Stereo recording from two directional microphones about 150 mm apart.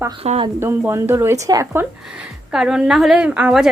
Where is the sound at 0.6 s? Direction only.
15° right (ahead or behind).